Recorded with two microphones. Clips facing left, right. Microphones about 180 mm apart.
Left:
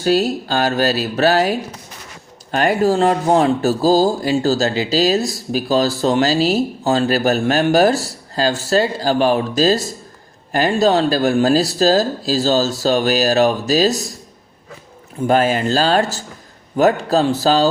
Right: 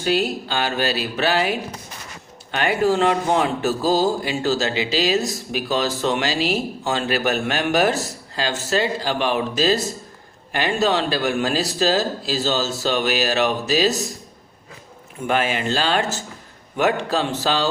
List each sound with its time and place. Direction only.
0.0 s speech: 40° left (ahead or behind)
15.3 s speech: 40° left (ahead or behind)